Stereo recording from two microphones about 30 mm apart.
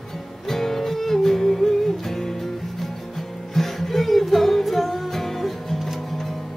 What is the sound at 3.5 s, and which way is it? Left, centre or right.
Music, centre.